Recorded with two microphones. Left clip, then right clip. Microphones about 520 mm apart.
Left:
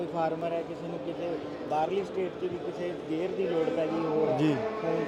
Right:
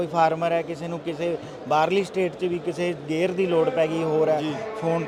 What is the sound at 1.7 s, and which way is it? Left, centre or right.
Speech, right.